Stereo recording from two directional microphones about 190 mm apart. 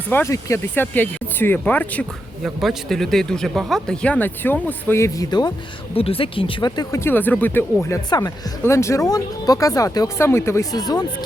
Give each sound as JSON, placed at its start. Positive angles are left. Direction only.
{"t": 0.1, "sound": "speech", "side_deg": 15}
{"t": 5.9, "sound": "speech", "side_deg": 30}